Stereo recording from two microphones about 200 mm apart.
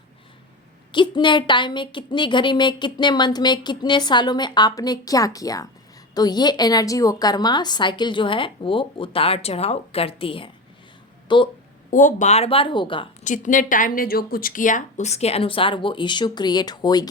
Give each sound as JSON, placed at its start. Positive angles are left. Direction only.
{"t": 0.9, "sound": "a woman's voice", "side_deg": 25}
{"t": 11.9, "sound": "a woman's voice", "side_deg": 40}
{"t": 13.2, "sound": "a woman's voice", "side_deg": 40}